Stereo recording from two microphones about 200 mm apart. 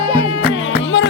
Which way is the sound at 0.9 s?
70° left (ahead or behind).